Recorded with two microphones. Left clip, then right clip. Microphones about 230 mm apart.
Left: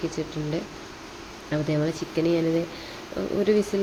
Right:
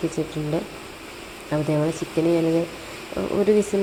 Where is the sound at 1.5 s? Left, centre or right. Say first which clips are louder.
Right 3 dB; centre.